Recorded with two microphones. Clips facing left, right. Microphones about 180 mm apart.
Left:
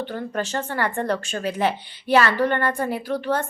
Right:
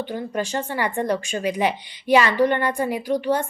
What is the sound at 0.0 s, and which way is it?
Speech, 10° right (ahead or behind).